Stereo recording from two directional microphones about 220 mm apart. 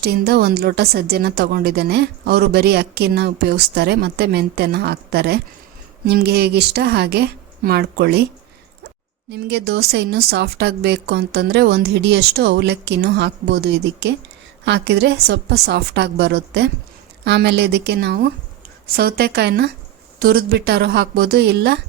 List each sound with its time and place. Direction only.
0.0 s a woman's voice: 45° right (ahead or behind)
9.3 s a woman's voice: 50° right (ahead or behind)